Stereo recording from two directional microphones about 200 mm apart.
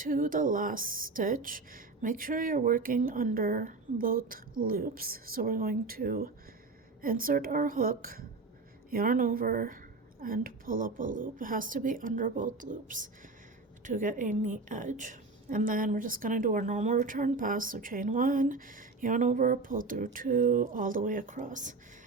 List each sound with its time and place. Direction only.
0.0 s a woman's voice: 45° right (ahead or behind)